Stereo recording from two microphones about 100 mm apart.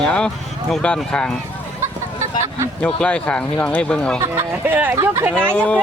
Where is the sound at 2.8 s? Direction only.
10° left (ahead or behind).